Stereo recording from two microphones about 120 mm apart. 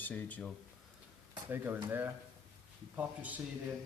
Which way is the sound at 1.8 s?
20° right (ahead or behind).